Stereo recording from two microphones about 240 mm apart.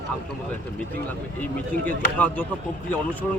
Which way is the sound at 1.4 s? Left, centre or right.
Centre.